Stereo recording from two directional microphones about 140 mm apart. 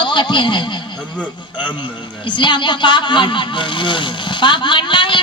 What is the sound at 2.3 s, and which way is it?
Speech, 35° left (ahead or behind).